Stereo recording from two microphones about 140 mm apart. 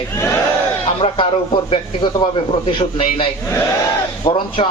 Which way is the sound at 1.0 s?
40° left (ahead or behind).